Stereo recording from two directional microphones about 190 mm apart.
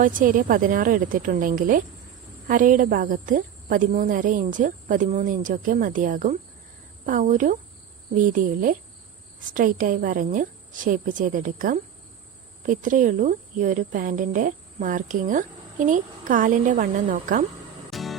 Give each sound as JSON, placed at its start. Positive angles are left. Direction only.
{"t": 0.0, "sound": "speech", "side_deg": -45}
{"t": 17.9, "sound": "music", "side_deg": 0}